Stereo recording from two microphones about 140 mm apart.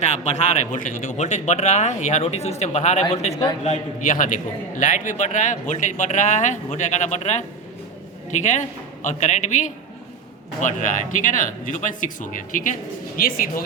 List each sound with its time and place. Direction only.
0.0 s speech: 50° left (ahead or behind); by 12.7 s 70° left (ahead or behind)
13.1 s speech: 90° left